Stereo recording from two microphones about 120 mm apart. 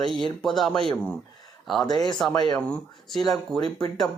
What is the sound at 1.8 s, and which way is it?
Speech, 35° left (ahead or behind).